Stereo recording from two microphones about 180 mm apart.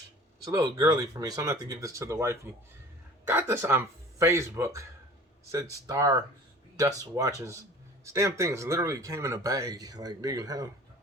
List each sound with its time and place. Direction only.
0.4 s speech: 20° right (ahead or behind)